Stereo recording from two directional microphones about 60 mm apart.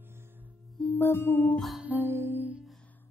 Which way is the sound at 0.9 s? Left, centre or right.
Left.